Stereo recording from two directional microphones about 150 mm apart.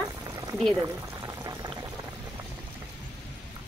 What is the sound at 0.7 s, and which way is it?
Boiling, 20° right (ahead or behind).